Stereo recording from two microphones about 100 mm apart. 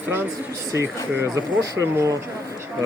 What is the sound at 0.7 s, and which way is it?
Speech, 30° right (ahead or behind).